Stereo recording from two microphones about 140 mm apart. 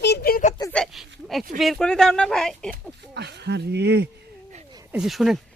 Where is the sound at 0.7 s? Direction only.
Centre (ahead or behind).